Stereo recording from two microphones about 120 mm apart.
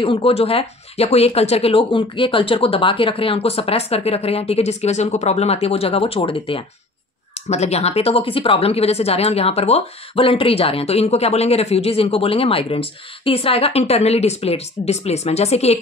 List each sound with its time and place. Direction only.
0.0 s speech: 50° left (ahead or behind)
7.4 s speech: 65° left (ahead or behind)